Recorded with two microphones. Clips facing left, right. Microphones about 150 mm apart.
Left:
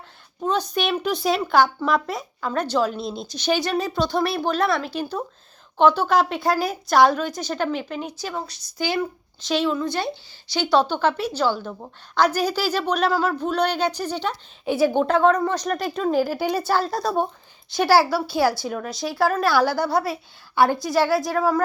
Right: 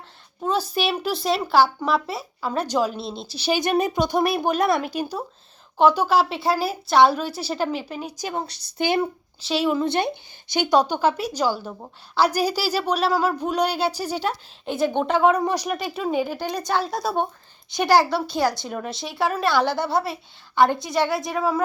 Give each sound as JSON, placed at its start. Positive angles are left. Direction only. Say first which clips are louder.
{"t": 0.4, "sound": "speech", "louder": "even", "side_deg": -5}
{"t": 3.6, "sound": "a woman's voice", "louder": "right 2 dB", "side_deg": -20}
{"t": 8.8, "sound": "speech", "louder": "right 2 dB", "side_deg": -20}
{"t": 9.5, "sound": "a woman's voice", "louder": "even", "side_deg": -5}
{"t": 9.7, "sound": "a woman's voice", "louder": "right 3 dB", "side_deg": -25}
{"t": 14.6, "sound": "speech", "louder": "left 3 dB", "side_deg": 5}